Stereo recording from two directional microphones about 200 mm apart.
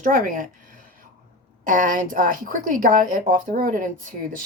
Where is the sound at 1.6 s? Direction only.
40° right (ahead or behind).